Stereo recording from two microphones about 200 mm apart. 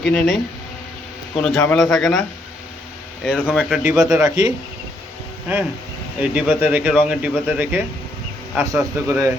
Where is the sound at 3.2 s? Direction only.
Centre (ahead or behind).